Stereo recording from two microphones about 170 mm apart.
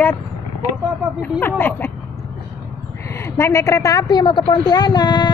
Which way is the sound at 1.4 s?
10° left (ahead or behind).